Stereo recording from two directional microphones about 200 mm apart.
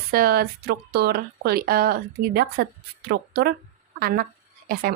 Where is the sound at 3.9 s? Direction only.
45° right (ahead or behind).